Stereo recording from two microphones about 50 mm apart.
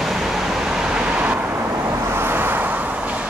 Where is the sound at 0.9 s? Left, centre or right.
Right.